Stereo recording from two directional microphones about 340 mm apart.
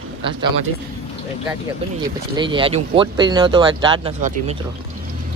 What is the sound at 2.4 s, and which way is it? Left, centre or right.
Speech, centre.